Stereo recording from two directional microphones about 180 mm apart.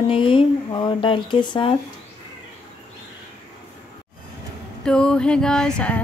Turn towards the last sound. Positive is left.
turn(degrees=5)  # may be behind; listen again after turning